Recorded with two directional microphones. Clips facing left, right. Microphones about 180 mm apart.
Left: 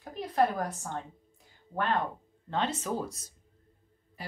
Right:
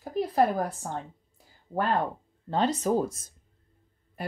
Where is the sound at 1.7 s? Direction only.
35° right (ahead or behind).